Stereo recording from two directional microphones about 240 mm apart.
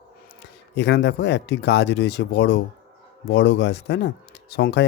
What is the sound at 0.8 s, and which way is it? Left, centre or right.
Speech, left.